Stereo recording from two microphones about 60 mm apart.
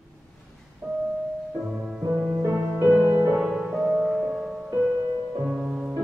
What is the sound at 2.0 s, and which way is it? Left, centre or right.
Music, right.